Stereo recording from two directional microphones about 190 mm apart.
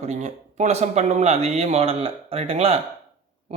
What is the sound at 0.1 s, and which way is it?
Speech, 35° right (ahead or behind).